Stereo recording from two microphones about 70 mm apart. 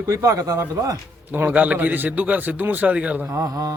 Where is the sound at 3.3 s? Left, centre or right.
Right.